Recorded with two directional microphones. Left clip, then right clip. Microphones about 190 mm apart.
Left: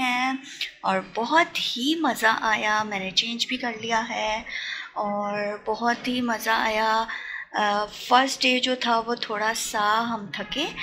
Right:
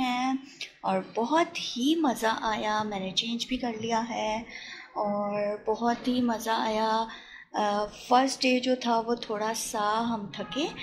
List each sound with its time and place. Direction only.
0.0 s speech: centre (ahead or behind)
4.9 s a sound: 15° left (ahead or behind)
5.3 s speech: centre (ahead or behind)